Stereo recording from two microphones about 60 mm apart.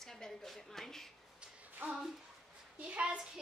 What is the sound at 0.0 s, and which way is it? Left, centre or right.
A woman's voice, centre.